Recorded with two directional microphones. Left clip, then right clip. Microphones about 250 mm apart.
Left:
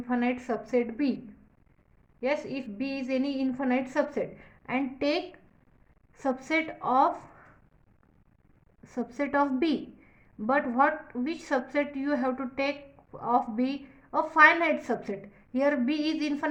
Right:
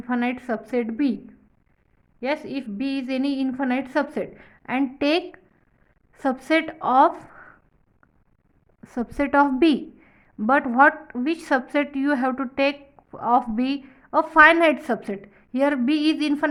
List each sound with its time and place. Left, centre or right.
0.0 s a woman's voice: right
2.2 s a woman's voice: right
8.8 s a woman's voice: right